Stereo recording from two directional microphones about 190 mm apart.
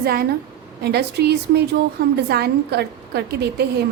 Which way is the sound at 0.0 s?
55° right (ahead or behind).